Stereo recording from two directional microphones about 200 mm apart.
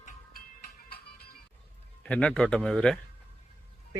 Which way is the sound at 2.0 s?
5° left (ahead or behind).